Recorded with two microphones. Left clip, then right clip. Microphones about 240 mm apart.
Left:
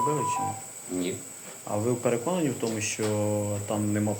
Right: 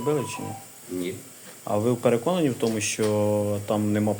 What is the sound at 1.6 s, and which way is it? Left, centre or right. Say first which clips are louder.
Speech: right 4 dB; right.